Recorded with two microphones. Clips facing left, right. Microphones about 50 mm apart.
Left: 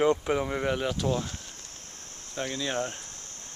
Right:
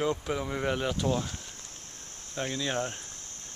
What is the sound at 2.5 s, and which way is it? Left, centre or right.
Speech, centre.